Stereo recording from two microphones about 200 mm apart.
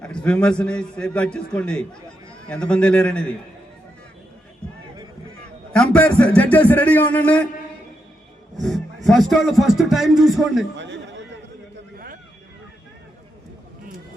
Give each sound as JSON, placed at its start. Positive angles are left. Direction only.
{"t": 0.0, "sound": "speech", "side_deg": 5}
{"t": 5.7, "sound": "a man's voice", "side_deg": 5}
{"t": 8.6, "sound": "speech", "side_deg": 0}
{"t": 10.8, "sound": "speech", "side_deg": -60}
{"t": 11.9, "sound": "a sound", "side_deg": -45}